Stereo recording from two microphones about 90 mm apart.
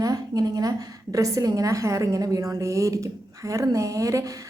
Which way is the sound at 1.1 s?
40° right (ahead or behind).